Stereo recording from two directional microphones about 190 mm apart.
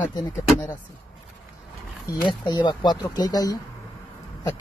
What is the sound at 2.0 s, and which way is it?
Speech, 25° left (ahead or behind).